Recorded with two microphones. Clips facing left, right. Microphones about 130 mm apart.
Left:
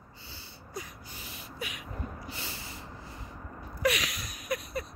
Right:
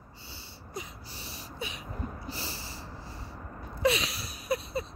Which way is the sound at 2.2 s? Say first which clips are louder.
Right 2 dB; 35° right (ahead or behind).